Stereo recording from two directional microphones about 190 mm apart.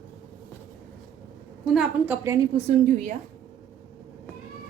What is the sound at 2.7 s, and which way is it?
Speech, 40° right (ahead or behind).